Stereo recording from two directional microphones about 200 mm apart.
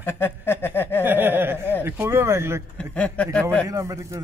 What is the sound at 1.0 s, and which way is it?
Speech, 10° right (ahead or behind).